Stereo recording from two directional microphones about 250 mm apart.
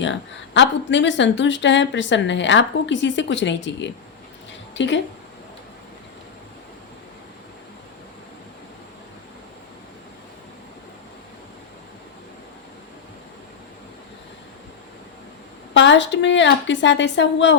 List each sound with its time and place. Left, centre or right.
0.0 s a woman's voice: left
15.7 s speech: left